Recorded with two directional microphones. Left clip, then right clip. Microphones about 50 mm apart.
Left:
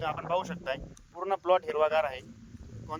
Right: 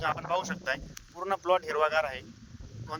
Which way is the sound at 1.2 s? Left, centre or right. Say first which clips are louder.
Left 1 dB; left.